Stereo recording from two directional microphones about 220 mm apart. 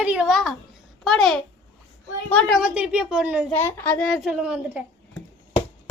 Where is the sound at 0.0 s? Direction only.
5° right (ahead or behind).